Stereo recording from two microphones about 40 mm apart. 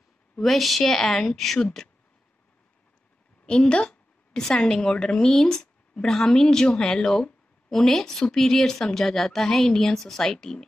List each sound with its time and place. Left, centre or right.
0.4 s a woman's voice: centre
3.4 s a woman's voice: left